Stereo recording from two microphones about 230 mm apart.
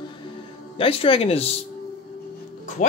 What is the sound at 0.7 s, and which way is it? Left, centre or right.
Speech, left.